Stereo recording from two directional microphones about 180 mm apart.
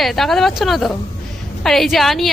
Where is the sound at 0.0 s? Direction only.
Centre (ahead or behind).